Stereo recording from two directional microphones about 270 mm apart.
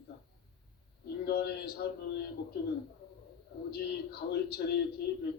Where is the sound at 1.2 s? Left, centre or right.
Left.